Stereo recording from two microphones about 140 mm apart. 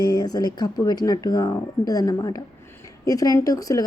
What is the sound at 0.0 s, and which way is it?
A woman's voice, 30° left (ahead or behind).